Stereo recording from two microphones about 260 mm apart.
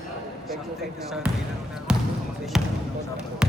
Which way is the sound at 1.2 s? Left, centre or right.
Centre.